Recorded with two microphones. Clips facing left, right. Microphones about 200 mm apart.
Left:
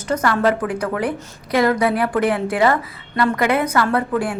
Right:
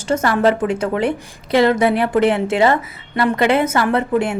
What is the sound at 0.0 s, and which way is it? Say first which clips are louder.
A woman's voice: right 2 dB; 25° right (ahead or behind).